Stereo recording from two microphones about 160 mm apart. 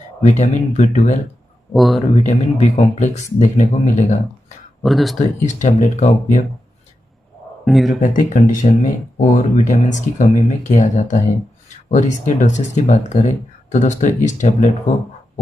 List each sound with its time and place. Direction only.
0.2 s speech: 45° left (ahead or behind)
1.7 s speech: centre (ahead or behind)
2.1 s speech: 50° left (ahead or behind)
4.8 s speech: centre (ahead or behind)
5.2 s speech: 50° left (ahead or behind)
7.6 s speech: centre (ahead or behind)
8.0 s speech: 55° left (ahead or behind)